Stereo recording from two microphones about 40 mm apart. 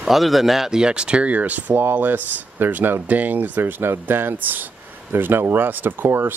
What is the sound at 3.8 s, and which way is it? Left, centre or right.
Speech, right.